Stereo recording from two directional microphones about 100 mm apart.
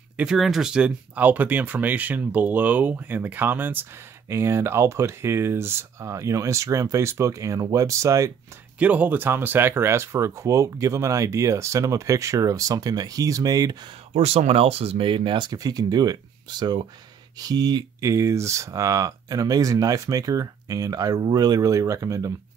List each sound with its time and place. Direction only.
0.2 s speech: 5° right (ahead or behind); by 8.3 s 30° right (ahead or behind)
8.7 s speech: 15° right (ahead or behind); by 13.7 s 40° right (ahead or behind)
14.1 s speech: 90° right; by 15.5 s 55° right (ahead or behind)
15.5 s speech: 40° right (ahead or behind)
18.0 s speech: 30° right (ahead or behind)